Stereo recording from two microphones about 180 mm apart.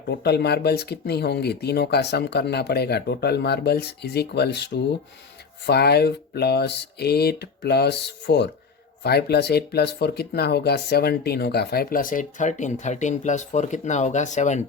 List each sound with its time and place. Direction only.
0.1 s speech: 65° left (ahead or behind); by 14.6 s 40° left (ahead or behind)